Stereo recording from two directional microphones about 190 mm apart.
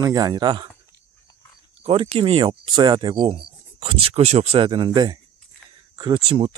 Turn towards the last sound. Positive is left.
turn(degrees=-30)  # may be behind; listen again after turning